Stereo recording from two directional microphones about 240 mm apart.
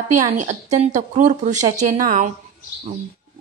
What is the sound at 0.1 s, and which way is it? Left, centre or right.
Speech, right.